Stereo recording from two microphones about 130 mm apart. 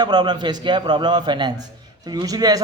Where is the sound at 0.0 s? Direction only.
35° right (ahead or behind).